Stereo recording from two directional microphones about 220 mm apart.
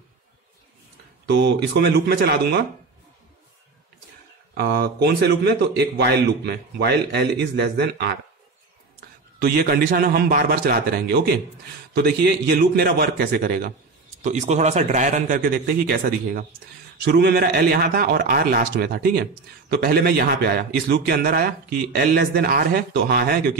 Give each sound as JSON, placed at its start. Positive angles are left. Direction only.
{"t": 1.2, "sound": "a man's voice", "side_deg": -50}
{"t": 4.6, "sound": "a man's voice", "side_deg": -45}
{"t": 9.4, "sound": "a man's voice", "side_deg": -45}
{"t": 14.2, "sound": "a man's voice", "side_deg": -30}